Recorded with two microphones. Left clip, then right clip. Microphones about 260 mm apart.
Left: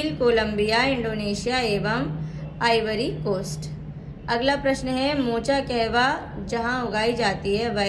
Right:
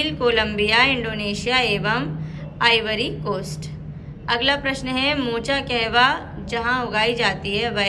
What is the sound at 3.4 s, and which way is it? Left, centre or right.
Speech, centre.